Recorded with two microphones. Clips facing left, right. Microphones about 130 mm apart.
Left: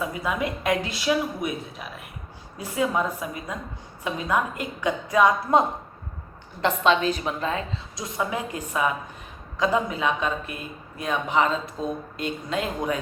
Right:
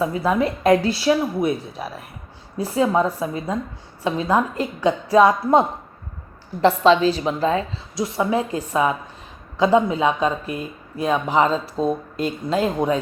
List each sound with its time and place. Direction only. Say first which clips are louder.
0.0 s a woman's voice: right 7 dB; 35° right (ahead or behind)